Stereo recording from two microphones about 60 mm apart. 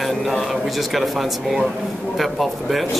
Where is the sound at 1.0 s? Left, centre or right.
Centre.